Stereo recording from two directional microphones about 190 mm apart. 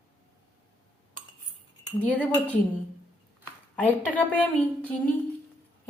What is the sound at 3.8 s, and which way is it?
Speech, 10° left (ahead or behind).